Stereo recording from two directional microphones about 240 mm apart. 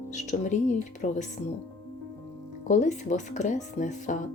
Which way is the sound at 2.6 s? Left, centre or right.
Left.